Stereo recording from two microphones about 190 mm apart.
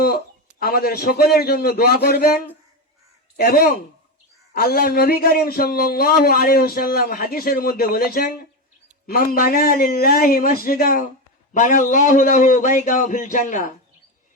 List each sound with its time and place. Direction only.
0.6 s a man's voice: 55° left (ahead or behind)